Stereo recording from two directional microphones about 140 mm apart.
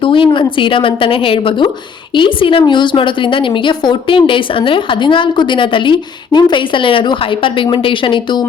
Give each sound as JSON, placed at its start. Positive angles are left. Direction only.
{"t": 0.0, "sound": "a woman's voice", "side_deg": 35}